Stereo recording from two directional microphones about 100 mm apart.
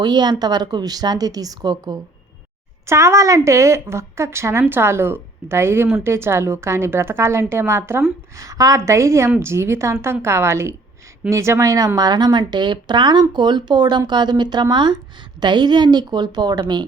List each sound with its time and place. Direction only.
0.0 s speech: 45° right (ahead or behind)
2.8 s a woman's voice: 30° right (ahead or behind); by 16.8 s 45° right (ahead or behind)